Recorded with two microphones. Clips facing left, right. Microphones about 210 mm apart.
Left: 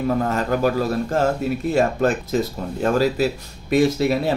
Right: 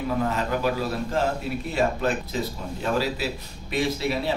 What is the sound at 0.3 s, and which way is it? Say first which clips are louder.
Speech: left 5 dB; 45° left (ahead or behind).